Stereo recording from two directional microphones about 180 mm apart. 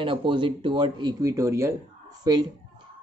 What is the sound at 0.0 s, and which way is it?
Speech, 30° right (ahead or behind).